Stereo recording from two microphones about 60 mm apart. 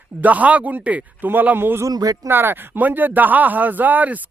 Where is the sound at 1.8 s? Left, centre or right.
Right.